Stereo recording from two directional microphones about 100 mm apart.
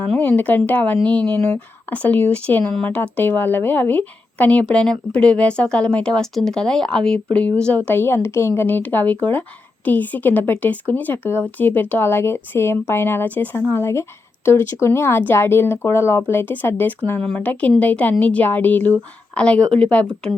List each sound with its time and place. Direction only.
0.0 s speech: 15° left (ahead or behind)